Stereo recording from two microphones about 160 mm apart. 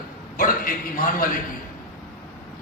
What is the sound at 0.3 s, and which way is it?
Speech, 60° left (ahead or behind).